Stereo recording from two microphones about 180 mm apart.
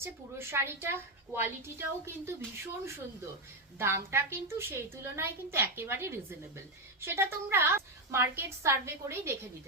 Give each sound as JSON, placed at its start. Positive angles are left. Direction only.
{"t": 0.0, "sound": "a woman's voice", "side_deg": -15}
{"t": 3.8, "sound": "a woman's voice", "side_deg": -15}